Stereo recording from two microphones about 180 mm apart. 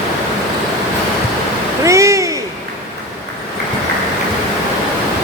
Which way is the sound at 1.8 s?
15° right (ahead or behind).